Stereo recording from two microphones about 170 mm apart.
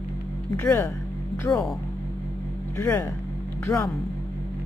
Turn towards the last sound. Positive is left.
turn(degrees=15)  # may be behind; listen again after turning